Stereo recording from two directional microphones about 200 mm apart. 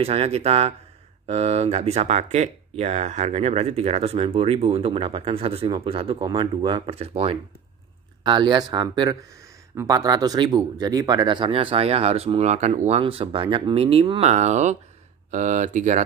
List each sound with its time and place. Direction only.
0.0 s speech: 30° right (ahead or behind)